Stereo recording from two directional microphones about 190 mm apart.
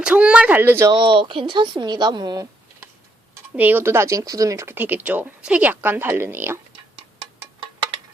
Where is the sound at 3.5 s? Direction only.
10° right (ahead or behind).